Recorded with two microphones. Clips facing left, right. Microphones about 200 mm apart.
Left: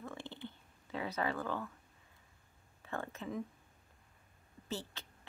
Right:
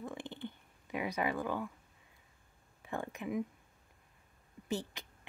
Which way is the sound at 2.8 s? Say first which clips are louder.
Right 2 dB; 15° right (ahead or behind).